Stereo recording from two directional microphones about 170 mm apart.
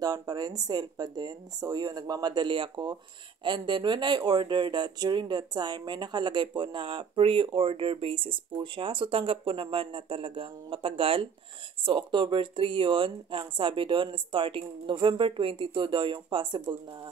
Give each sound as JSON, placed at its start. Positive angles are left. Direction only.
{"t": 0.0, "sound": "speech", "side_deg": -25}